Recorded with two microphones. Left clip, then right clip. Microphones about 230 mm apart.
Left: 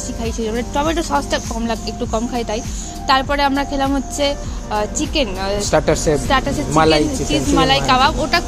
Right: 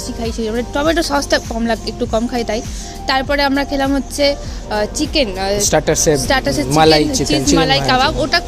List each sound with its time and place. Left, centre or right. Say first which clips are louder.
0.2 s speech: right 2 dB; right